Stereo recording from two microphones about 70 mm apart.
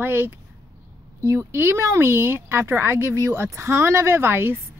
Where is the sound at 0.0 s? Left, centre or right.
Right.